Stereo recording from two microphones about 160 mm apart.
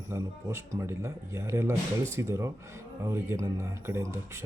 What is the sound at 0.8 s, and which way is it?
Speech, 15° right (ahead or behind).